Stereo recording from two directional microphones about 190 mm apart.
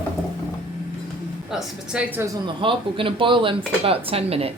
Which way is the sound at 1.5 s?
5° right (ahead or behind).